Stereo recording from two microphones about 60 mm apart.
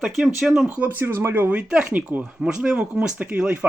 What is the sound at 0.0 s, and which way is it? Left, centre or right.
Speech, centre.